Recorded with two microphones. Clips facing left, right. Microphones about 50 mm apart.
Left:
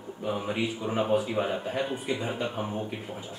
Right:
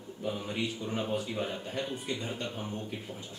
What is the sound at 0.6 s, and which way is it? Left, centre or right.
Speech, centre.